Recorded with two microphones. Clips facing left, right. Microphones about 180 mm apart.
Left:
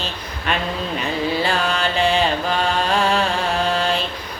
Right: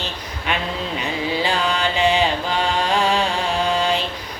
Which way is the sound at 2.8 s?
15° right (ahead or behind).